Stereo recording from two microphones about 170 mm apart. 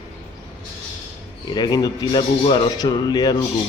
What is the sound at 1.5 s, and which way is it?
Speech, 25° left (ahead or behind).